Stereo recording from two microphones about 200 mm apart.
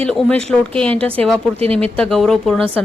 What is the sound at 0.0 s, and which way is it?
A woman's voice, 5° left (ahead or behind).